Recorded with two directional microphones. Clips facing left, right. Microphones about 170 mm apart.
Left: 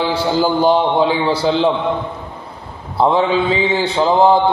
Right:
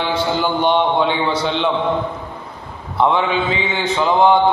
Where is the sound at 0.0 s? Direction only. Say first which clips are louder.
Left 3 dB; 35° left (ahead or behind).